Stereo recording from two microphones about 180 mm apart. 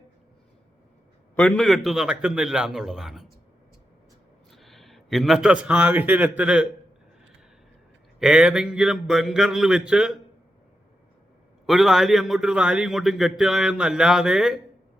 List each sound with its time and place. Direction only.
1.4 s a man's voice: 5° left (ahead or behind)
4.5 s a man's voice: centre (ahead or behind)
8.2 s a man's voice: 5° right (ahead or behind)
11.6 s a man's voice: centre (ahead or behind)